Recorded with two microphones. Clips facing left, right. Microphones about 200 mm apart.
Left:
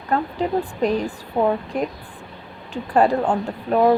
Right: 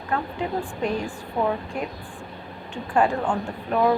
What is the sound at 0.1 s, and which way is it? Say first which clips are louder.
A woman's voice: left 5 dB; 35° left (ahead or behind).